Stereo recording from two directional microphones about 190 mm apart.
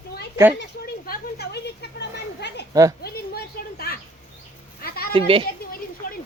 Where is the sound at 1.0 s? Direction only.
55° left (ahead or behind).